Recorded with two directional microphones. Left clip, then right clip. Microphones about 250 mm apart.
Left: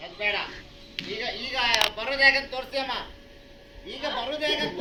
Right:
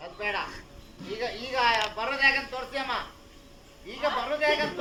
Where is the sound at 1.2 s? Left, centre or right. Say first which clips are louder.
Right 2 dB; centre.